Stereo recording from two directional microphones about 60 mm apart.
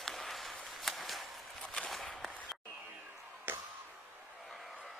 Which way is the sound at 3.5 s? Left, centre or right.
Right.